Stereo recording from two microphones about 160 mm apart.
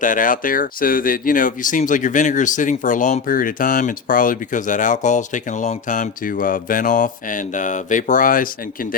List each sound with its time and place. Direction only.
0.0 s speech: 55° left (ahead or behind)